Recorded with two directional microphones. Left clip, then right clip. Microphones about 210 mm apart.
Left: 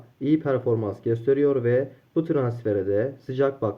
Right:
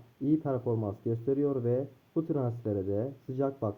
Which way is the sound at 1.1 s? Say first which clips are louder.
Left 10 dB; 15° left (ahead or behind).